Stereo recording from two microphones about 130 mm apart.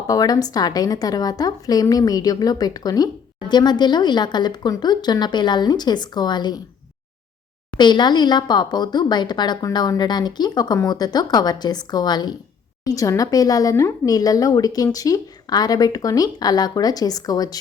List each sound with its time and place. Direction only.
0.1 s a woman's voice: 30° left (ahead or behind)
7.8 s a woman's voice: 35° left (ahead or behind)